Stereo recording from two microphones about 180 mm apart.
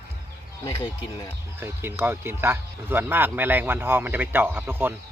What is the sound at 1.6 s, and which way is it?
Speech, 15° right (ahead or behind).